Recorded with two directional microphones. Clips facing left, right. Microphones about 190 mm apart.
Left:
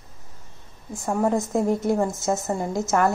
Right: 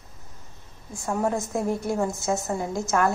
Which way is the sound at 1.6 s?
20° left (ahead or behind).